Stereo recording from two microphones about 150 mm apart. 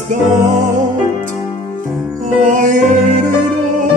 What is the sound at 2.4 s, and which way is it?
Music, 60° right (ahead or behind).